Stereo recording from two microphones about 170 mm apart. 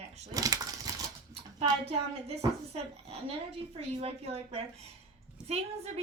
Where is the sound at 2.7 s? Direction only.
35° right (ahead or behind).